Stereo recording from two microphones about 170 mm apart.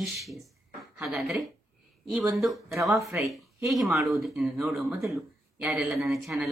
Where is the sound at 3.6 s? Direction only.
Centre (ahead or behind).